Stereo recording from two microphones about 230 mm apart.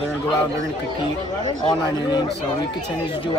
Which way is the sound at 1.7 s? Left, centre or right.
Centre.